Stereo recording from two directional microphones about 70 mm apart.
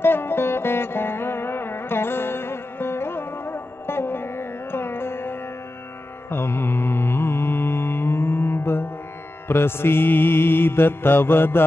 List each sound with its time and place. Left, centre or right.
0.0 s music: left
6.3 s mantra: left